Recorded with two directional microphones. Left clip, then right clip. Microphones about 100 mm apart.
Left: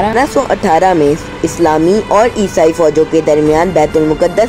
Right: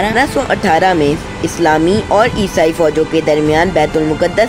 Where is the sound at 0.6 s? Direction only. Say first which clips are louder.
Left 2 dB; 15° left (ahead or behind).